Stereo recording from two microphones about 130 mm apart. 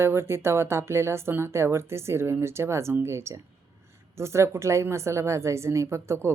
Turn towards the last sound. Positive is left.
turn(degrees=-20)  # may be behind; listen again after turning